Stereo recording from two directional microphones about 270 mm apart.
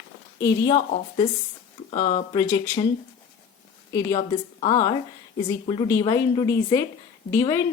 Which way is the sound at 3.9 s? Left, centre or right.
Centre.